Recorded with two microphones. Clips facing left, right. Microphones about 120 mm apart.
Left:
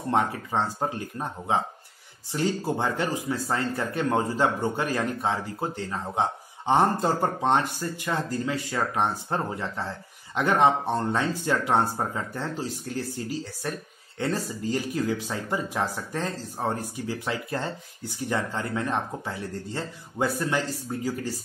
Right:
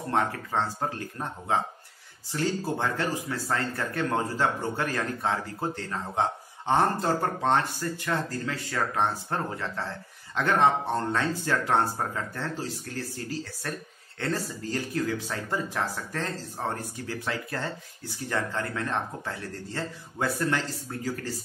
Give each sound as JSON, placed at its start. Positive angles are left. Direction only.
{"t": 0.1, "sound": "speech", "side_deg": 20}